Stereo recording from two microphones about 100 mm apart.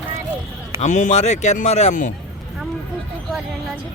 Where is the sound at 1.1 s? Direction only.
90° left.